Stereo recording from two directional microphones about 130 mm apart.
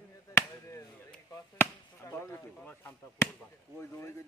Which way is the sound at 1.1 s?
15° left (ahead or behind).